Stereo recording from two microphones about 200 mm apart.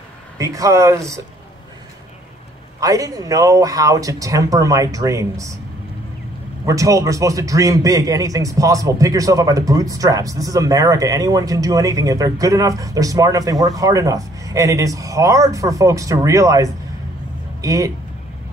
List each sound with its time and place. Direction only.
0.4 s a man's voice: 15° right (ahead or behind)
2.8 s a man's voice: 15° right (ahead or behind)
6.6 s a man's voice: 15° right (ahead or behind)